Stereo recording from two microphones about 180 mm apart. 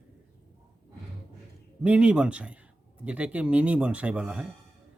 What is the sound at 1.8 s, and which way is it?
Speech, 5° right (ahead or behind).